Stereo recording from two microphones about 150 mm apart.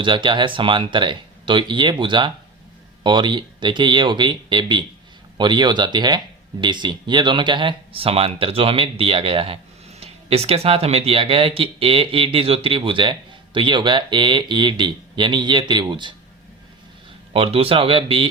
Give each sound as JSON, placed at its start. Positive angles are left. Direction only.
{"t": 0.0, "sound": "speech", "side_deg": -35}
{"t": 17.3, "sound": "speech", "side_deg": -40}